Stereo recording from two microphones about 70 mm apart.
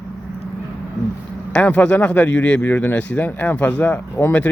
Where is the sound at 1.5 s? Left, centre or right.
Centre.